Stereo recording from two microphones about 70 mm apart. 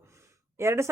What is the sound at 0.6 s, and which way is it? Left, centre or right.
Speech, right.